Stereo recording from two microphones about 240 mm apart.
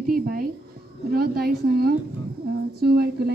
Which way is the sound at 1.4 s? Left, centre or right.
Right.